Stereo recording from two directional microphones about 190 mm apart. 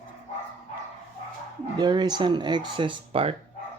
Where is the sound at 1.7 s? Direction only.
20° right (ahead or behind).